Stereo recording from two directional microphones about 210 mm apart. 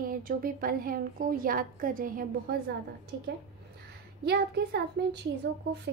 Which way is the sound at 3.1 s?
55° right (ahead or behind).